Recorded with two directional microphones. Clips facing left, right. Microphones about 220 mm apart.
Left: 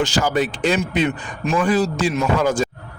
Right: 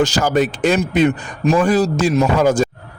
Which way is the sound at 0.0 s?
40° right (ahead or behind).